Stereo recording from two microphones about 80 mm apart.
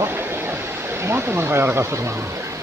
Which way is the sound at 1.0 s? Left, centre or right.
Right.